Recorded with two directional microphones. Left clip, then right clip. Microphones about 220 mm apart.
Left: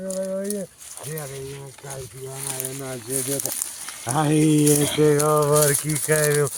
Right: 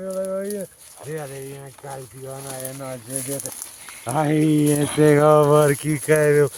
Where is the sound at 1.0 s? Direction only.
45° left (ahead or behind).